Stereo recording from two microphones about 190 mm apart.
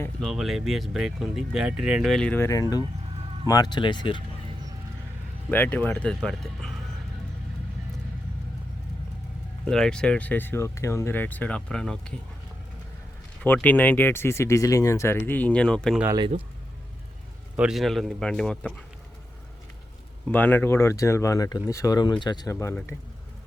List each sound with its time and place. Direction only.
0.2 s speech: centre (ahead or behind); by 4.2 s 25° left (ahead or behind)
5.5 s speech: 10° left (ahead or behind)
9.6 s speech: 5° left (ahead or behind)
13.4 s speech: 10° left (ahead or behind)
16.1 s speech: 25° right (ahead or behind)
17.6 s speech: centre (ahead or behind)
20.2 s speech: 10° left (ahead or behind)
22.5 s speech: 10° left (ahead or behind)